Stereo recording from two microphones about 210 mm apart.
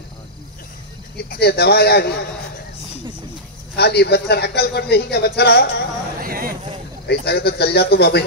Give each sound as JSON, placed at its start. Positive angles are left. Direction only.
{"t": 1.1, "sound": "a man's voice", "side_deg": 50}
{"t": 3.7, "sound": "a man's voice", "side_deg": 50}
{"t": 6.2, "sound": "a sound", "side_deg": -45}
{"t": 7.1, "sound": "a man's voice", "side_deg": 50}